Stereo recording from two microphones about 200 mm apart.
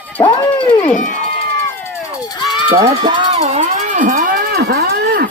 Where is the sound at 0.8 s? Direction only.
40° left (ahead or behind).